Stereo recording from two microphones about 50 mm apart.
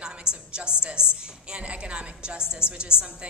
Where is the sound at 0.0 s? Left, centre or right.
Centre.